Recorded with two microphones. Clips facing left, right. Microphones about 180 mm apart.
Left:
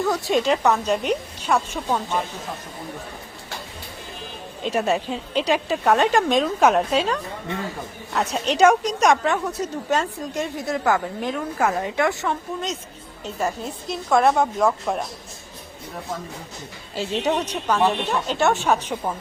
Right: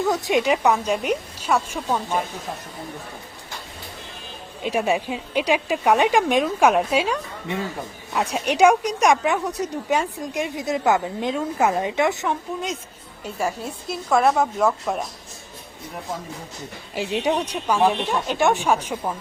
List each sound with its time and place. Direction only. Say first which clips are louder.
0.0 s speech: even; 15° right (ahead or behind)
4.6 s speech: even; 10° right (ahead or behind)
16.9 s speech: even; 15° right (ahead or behind)